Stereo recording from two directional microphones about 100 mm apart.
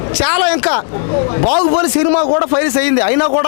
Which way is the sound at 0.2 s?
15° left (ahead or behind).